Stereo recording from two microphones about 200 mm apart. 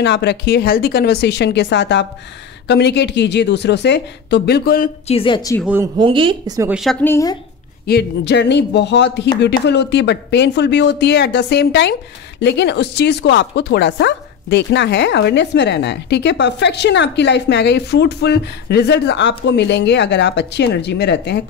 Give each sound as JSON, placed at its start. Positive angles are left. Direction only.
{"t": 0.0, "sound": "speech", "side_deg": 60}
{"t": 5.0, "sound": "speech", "side_deg": 25}
{"t": 5.9, "sound": "speech", "side_deg": -25}
{"t": 6.7, "sound": "a woman's voice", "side_deg": 0}
{"t": 7.8, "sound": "speech", "side_deg": 55}